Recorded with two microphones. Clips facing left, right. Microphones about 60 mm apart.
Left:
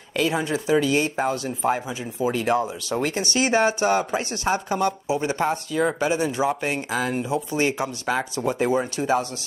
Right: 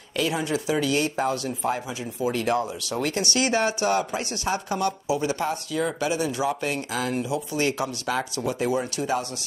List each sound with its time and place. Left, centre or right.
0.2 s speech: left